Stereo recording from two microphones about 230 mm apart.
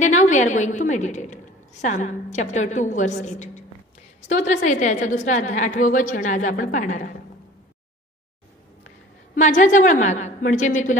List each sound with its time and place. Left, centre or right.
0.0 s a woman's voice: left
9.3 s a woman's voice: left